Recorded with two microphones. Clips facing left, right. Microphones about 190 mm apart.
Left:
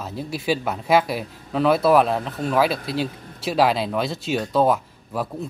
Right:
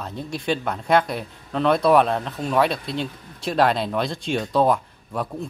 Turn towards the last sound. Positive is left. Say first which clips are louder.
# left 1 dB
turn(degrees=5)  # may be behind; listen again after turning